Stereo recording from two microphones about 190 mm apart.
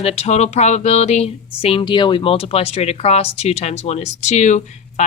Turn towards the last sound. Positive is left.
turn(degrees=35)  # may be behind; listen again after turning